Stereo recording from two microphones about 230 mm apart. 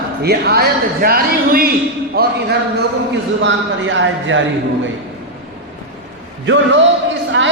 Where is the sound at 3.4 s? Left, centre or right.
Right.